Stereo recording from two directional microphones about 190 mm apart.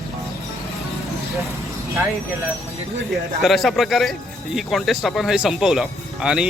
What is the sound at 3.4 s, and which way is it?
Speech, centre (ahead or behind).